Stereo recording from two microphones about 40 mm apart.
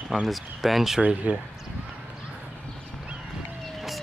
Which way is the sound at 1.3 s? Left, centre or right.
Right.